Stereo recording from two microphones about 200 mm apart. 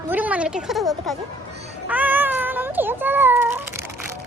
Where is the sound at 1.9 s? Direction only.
10° right (ahead or behind).